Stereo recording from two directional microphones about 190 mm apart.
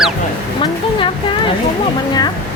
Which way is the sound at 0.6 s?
25° left (ahead or behind).